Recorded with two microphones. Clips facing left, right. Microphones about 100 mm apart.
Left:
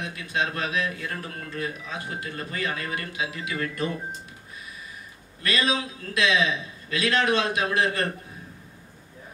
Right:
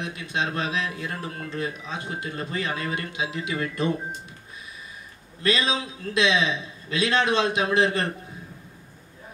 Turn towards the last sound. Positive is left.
turn(degrees=-25)  # may be behind; listen again after turning